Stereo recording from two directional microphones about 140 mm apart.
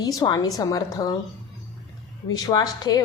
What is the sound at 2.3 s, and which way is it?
Speech, 30° left (ahead or behind).